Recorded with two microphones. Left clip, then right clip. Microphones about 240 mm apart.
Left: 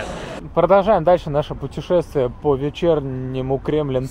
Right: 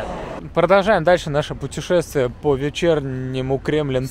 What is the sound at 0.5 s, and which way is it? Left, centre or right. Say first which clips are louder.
Speech: left 1 dB; right.